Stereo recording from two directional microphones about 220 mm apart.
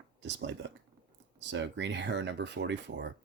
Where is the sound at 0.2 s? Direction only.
50° right (ahead or behind).